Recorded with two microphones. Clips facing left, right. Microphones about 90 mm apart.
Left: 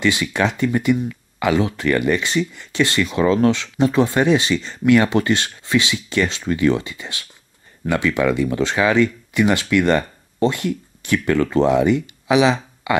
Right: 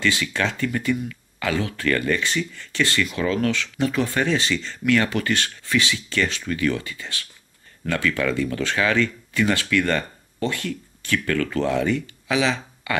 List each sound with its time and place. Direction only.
0.0 s speech: 15° left (ahead or behind)